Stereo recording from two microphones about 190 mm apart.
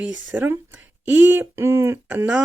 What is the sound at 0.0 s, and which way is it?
Speech, 10° right (ahead or behind).